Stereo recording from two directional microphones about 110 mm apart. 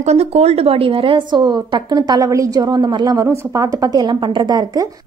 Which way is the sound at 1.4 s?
40° right (ahead or behind).